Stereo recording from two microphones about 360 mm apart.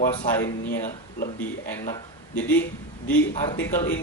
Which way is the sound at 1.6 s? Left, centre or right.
Centre.